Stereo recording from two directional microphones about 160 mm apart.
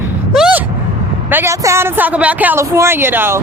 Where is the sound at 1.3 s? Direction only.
15° right (ahead or behind).